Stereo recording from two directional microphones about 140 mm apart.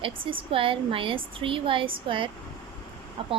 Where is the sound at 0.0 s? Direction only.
40° right (ahead or behind).